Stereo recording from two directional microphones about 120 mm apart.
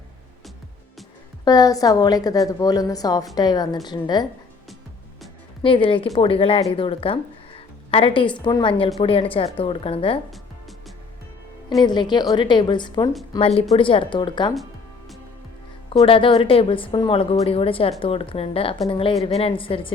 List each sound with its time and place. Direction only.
1.5 s a woman's voice: 30° left (ahead or behind)
5.6 s a woman's voice: 45° left (ahead or behind)
9.0 s speech: 50° left (ahead or behind)
10.3 s music: centre (ahead or behind)
11.8 s a woman's voice: 40° left (ahead or behind)
13.4 s a woman's voice: 55° left (ahead or behind)
16.0 s speech: 45° left (ahead or behind)